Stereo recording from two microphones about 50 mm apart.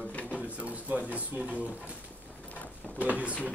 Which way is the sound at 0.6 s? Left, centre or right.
Right.